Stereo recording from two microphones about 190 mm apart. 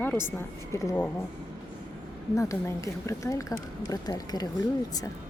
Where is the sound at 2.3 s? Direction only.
15° left (ahead or behind).